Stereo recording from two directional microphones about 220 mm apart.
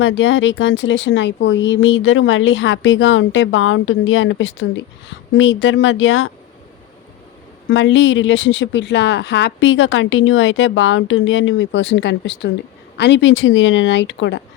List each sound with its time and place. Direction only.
0.0 s speech: 60° left (ahead or behind)
7.7 s speech: 60° left (ahead or behind)